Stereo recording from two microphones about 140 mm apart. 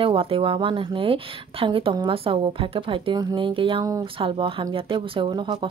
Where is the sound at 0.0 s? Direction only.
40° right (ahead or behind).